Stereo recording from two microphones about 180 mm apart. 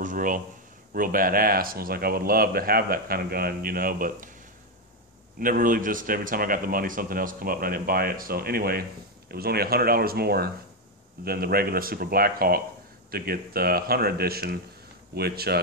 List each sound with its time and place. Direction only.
0.0 s a sound: 45° right (ahead or behind)
0.9 s speech: 50° right (ahead or behind)
5.4 s a man's voice: 50° right (ahead or behind)